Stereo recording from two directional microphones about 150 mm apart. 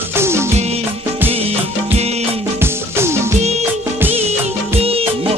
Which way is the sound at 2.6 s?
15° right (ahead or behind).